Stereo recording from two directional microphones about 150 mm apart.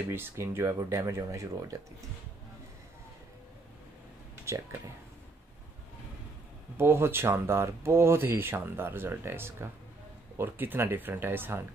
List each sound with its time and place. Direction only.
0.1 s speech: 15° right (ahead or behind)
4.5 s speech: 20° right (ahead or behind)
6.8 s speech: 15° right (ahead or behind)